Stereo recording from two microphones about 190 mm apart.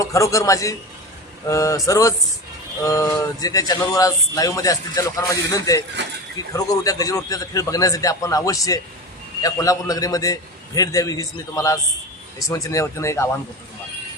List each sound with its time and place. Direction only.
0.0 s speech: 15° left (ahead or behind)